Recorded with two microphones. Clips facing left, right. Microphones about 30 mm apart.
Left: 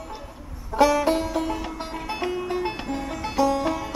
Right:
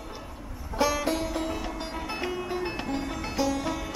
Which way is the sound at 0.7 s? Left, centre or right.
Centre.